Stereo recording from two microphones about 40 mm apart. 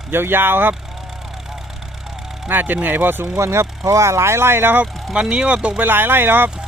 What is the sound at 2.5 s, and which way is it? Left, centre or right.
Speech, right.